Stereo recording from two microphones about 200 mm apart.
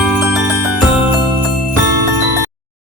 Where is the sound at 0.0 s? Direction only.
Centre (ahead or behind).